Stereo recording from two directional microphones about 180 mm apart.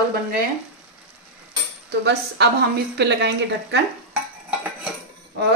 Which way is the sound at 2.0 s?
70° right (ahead or behind).